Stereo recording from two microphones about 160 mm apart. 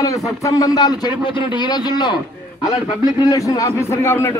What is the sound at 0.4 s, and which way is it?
A man's voice, 20° left (ahead or behind).